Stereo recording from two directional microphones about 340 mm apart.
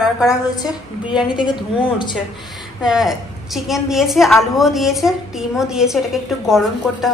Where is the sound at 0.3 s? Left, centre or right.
Centre.